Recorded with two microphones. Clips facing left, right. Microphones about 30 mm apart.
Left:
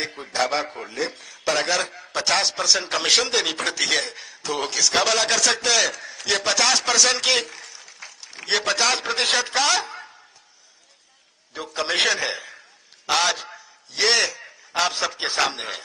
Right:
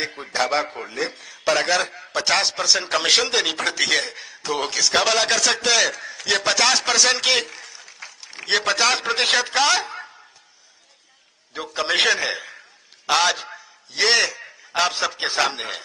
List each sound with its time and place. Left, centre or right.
0.0 s a man's voice: centre
11.5 s a man's voice: centre